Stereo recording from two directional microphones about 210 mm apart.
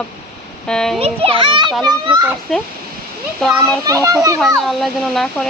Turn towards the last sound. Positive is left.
turn(degrees=0)  # may be behind; listen again after turning